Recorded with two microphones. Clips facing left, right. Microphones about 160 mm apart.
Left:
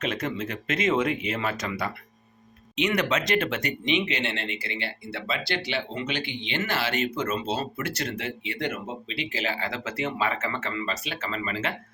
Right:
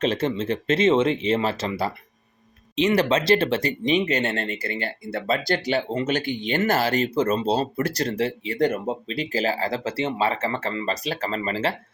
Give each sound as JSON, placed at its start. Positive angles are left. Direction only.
{"t": 0.0, "sound": "speech", "side_deg": -30}